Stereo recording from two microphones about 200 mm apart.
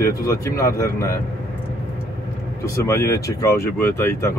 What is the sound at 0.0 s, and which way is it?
Speech, 15° left (ahead or behind).